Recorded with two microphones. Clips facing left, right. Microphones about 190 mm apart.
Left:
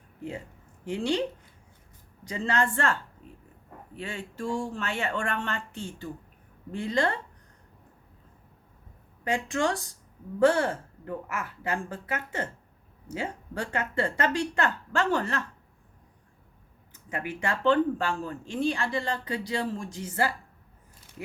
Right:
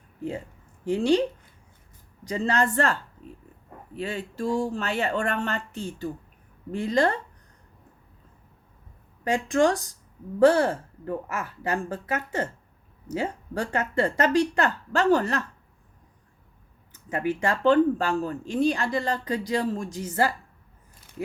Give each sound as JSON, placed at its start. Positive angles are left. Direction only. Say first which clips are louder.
{"t": 0.9, "sound": "speech", "louder": "right 6 dB", "side_deg": -40}
{"t": 2.2, "sound": "speech", "louder": "right 3 dB", "side_deg": -40}
{"t": 9.2, "sound": "speech", "louder": "right 6 dB", "side_deg": -40}
{"t": 16.9, "sound": "speech", "louder": "right 7 dB", "side_deg": -40}